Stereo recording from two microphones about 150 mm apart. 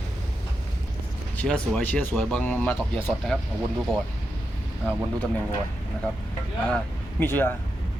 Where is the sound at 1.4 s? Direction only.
5° left (ahead or behind).